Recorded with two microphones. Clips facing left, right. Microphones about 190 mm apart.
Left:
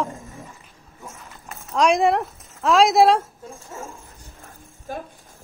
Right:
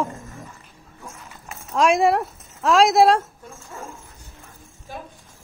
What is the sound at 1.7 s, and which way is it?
Speech, centre (ahead or behind).